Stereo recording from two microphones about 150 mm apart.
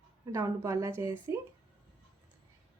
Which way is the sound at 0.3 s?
20° right (ahead or behind).